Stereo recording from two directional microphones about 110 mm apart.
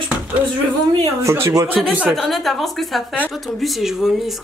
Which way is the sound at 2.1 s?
Centre (ahead or behind).